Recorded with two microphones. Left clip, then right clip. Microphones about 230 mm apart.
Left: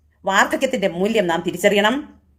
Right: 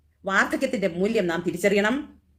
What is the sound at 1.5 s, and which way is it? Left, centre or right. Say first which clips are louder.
Speech: left 5 dB; left.